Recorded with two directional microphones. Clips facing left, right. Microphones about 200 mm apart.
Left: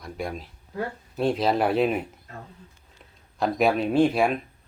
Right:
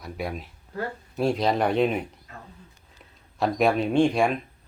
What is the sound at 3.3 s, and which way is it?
Speech, centre (ahead or behind).